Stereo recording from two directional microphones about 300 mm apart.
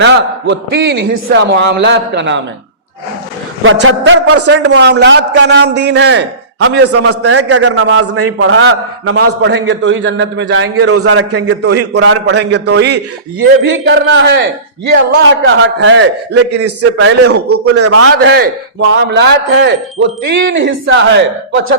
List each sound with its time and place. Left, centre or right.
0.0 s a man's voice: right
3.6 s a man's voice: right
18.9 s a man's voice: right